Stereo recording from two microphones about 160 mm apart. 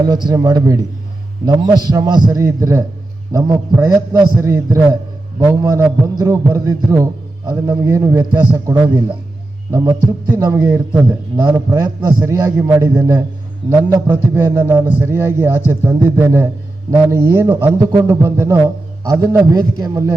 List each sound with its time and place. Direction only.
0.0 s a man's voice: 25° right (ahead or behind)